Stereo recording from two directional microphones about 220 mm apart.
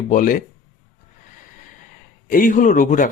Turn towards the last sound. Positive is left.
turn(degrees=35)  # may be behind; listen again after turning